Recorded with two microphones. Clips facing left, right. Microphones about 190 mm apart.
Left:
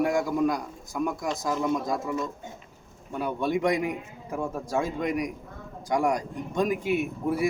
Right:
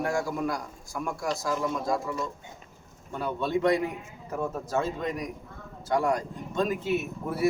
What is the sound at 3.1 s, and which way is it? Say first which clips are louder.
Speech: left 1 dB; 10° left (ahead or behind).